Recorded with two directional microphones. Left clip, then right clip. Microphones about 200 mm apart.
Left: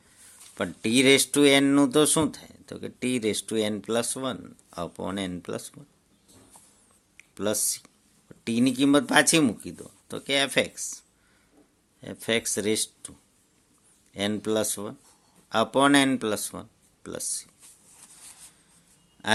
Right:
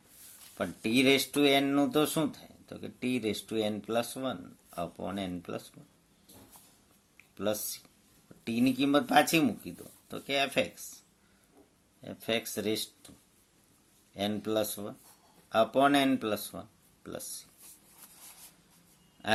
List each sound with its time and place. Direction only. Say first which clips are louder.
0.5 s speech: left 5 dB; 45° left (ahead or behind)
7.2 s speech: left 5 dB; 45° left (ahead or behind)
12.0 s speech: left 6 dB; 45° left (ahead or behind)